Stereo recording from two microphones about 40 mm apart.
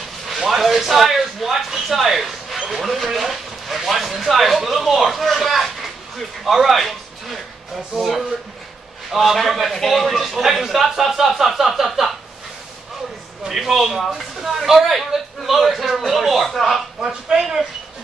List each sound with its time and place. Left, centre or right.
0.5 s a sound: centre
2.7 s speech: centre
7.9 s speech: centre
9.1 s a man's voice: centre
13.5 s a man's voice: centre
17.0 s speech: centre